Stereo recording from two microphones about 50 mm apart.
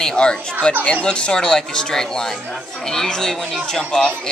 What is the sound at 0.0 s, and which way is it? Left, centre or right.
Speech, centre.